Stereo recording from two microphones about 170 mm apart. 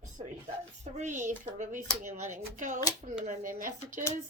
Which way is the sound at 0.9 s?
45° right (ahead or behind).